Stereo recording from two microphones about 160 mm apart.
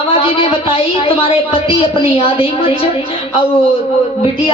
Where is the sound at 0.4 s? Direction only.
35° left (ahead or behind).